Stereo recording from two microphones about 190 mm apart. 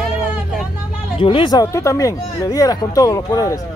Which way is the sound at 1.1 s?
25° left (ahead or behind).